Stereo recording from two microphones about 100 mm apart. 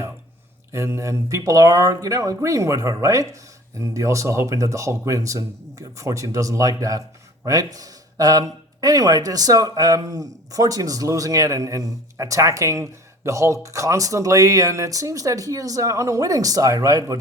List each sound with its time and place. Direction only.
0.7 s speech: 30° right (ahead or behind)